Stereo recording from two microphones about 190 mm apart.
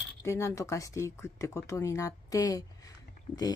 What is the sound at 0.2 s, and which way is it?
Speech, 15° left (ahead or behind).